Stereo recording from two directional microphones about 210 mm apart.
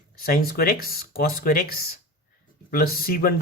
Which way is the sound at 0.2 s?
45° left (ahead or behind).